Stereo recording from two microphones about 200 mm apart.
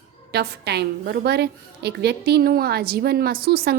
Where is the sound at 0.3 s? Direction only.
55° right (ahead or behind).